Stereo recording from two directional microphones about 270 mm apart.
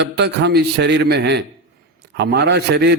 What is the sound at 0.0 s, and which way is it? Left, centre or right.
A man's voice, right.